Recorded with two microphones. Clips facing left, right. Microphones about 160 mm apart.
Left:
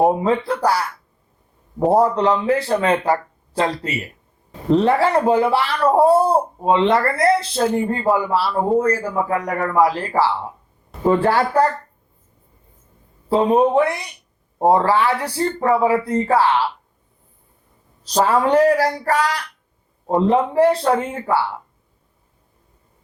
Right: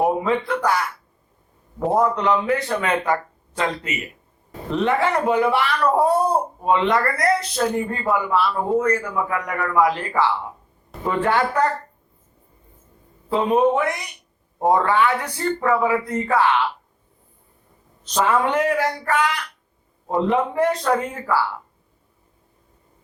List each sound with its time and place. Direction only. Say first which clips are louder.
0.0 s speech: left 3 dB; 30° left (ahead or behind)
13.2 s speech: left 2 dB; 35° left (ahead or behind)
18.0 s speech: left 3 dB; 35° left (ahead or behind)